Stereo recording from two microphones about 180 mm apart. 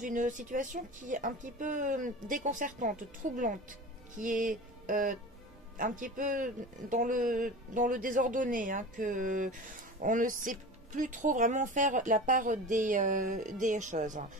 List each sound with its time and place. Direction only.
0.0 s speech: 45° right (ahead or behind)